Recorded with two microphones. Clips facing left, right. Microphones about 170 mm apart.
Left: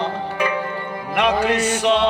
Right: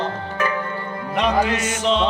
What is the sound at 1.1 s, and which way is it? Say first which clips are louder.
Music: left 1 dB; 65° left (ahead or behind).